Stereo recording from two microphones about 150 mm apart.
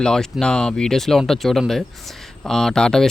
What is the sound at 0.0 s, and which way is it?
Speech, 5° left (ahead or behind).